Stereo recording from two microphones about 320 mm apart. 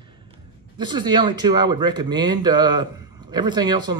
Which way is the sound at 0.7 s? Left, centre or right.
Centre.